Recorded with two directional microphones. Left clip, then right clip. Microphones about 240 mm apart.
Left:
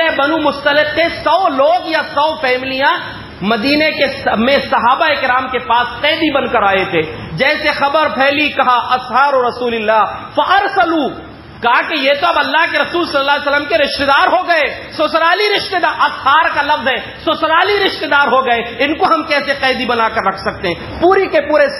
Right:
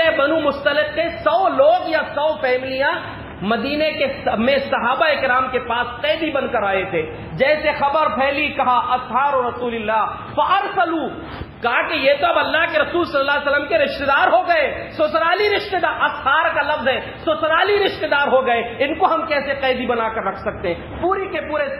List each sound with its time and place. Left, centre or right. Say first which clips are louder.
0.0 s a man's voice: left 3 dB; left